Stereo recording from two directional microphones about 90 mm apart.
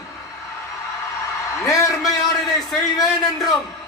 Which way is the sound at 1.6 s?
40° left (ahead or behind).